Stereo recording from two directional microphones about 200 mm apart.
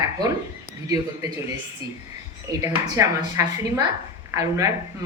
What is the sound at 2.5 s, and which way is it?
Speech, 15° right (ahead or behind).